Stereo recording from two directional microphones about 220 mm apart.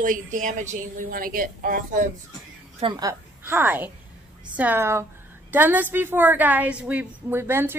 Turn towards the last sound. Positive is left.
turn(degrees=-10)  # may be behind; listen again after turning